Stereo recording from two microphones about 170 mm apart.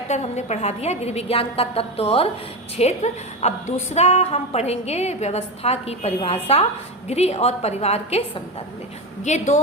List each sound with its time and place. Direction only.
0.1 s a woman's voice: 40° left (ahead or behind)
9.2 s a woman's voice: 45° left (ahead or behind)